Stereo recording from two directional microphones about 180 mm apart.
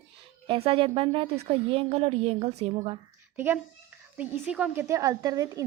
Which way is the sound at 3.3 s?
10° right (ahead or behind).